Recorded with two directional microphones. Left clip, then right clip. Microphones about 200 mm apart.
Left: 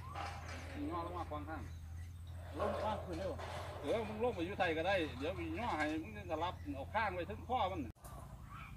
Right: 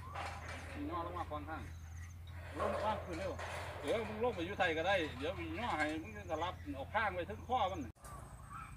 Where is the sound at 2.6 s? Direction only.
Centre (ahead or behind).